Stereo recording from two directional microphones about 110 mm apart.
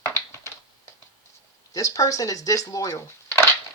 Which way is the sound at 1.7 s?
30° left (ahead or behind).